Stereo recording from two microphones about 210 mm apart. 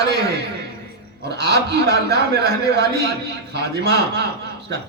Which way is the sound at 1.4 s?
50° right (ahead or behind).